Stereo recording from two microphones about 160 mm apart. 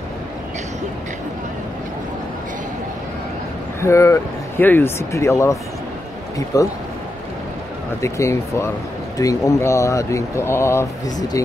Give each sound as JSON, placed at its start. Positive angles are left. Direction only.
{"t": 3.8, "sound": "speech", "side_deg": 20}
{"t": 8.0, "sound": "speech", "side_deg": 20}